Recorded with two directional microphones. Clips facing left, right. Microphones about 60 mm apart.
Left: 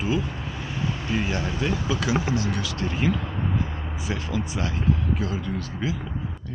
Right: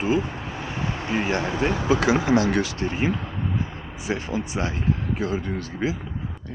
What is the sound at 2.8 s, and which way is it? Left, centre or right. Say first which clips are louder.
Speech: right 1 dB; right.